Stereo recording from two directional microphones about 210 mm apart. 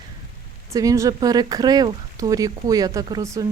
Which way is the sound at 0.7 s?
15° right (ahead or behind).